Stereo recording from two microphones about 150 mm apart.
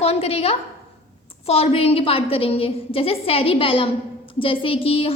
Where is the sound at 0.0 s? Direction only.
40° left (ahead or behind).